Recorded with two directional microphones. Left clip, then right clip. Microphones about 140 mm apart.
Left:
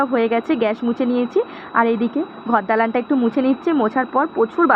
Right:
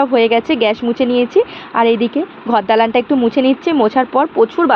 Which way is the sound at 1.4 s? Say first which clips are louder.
Right 2 dB; 45° right (ahead or behind).